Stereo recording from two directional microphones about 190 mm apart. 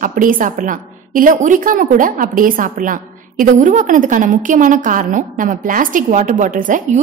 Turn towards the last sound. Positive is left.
turn(degrees=-45)  # may be behind; listen again after turning